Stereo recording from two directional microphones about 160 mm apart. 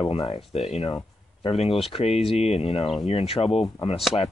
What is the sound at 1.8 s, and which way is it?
Speech, 40° left (ahead or behind).